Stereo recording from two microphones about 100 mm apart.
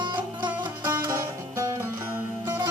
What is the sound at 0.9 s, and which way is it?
Music, 25° right (ahead or behind).